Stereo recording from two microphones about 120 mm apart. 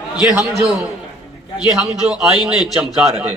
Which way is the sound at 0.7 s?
Centre (ahead or behind).